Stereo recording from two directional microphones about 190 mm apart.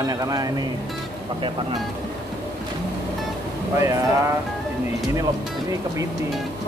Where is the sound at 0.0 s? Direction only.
20° right (ahead or behind).